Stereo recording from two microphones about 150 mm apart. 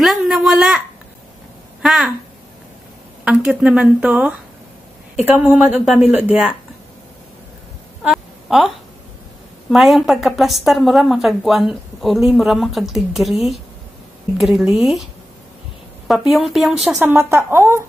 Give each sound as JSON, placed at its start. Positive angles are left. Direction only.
{"t": 0.0, "sound": "a sound", "side_deg": 0}
{"t": 1.8, "sound": "speech", "side_deg": 0}
{"t": 3.3, "sound": "speech", "side_deg": -10}
{"t": 8.0, "sound": "a sound", "side_deg": -5}
{"t": 9.7, "sound": "speech", "side_deg": 0}
{"t": 16.1, "sound": "speech", "side_deg": 0}
{"t": 17.0, "sound": "speech", "side_deg": -15}